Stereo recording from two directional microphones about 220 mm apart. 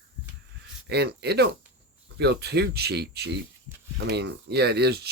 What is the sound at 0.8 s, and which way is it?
Speech, 50° right (ahead or behind).